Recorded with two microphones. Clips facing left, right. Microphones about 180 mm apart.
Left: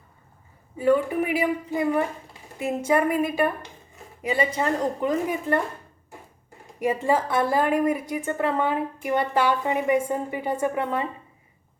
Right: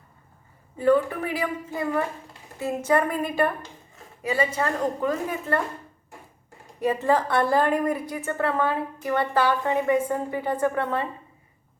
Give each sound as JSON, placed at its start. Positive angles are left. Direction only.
{"t": 0.8, "sound": "a woman's voice", "side_deg": 15}
{"t": 4.2, "sound": "a woman's voice", "side_deg": 20}
{"t": 6.7, "sound": "a woman's voice", "side_deg": 10}